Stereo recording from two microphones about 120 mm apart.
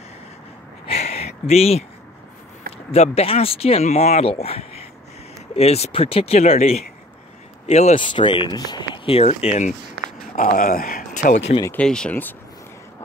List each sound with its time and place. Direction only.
0.8 s a sound: 60° left (ahead or behind)
2.9 s speech: 60° left (ahead or behind)
8.0 s speech: 40° left (ahead or behind)
9.0 s speech: 55° left (ahead or behind); by 9.8 s 75° left (ahead or behind)
10.3 s speech: 90° left
11.1 s speech: 80° left
11.7 s speech: 5° left (ahead or behind)